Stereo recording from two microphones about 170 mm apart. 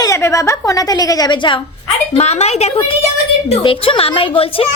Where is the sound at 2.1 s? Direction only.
40° left (ahead or behind).